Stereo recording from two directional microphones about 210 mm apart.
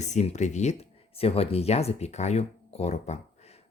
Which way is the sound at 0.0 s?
35° left (ahead or behind).